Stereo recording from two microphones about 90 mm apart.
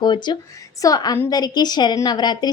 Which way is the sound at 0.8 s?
45° left (ahead or behind).